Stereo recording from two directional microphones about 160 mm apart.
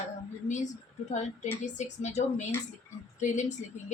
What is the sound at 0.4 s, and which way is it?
A woman's voice, 50° left (ahead or behind).